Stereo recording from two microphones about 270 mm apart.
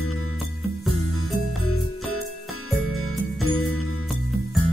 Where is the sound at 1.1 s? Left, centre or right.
Left.